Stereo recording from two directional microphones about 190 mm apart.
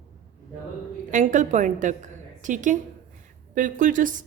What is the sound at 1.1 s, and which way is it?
A woman's voice, 40° right (ahead or behind).